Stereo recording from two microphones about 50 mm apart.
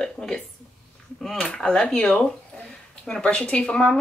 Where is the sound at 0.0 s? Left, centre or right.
Centre.